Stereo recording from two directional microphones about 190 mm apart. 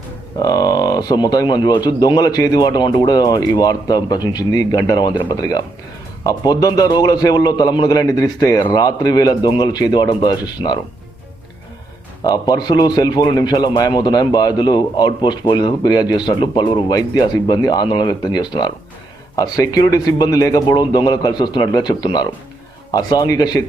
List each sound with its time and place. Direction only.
0.3 s a man's voice: 20° left (ahead or behind)
12.2 s a man's voice: 20° left (ahead or behind)